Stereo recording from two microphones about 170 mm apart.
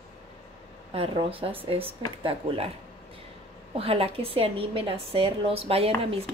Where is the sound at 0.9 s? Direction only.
35° right (ahead or behind).